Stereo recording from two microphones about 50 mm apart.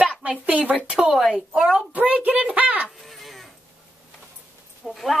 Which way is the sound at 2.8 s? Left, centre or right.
Centre.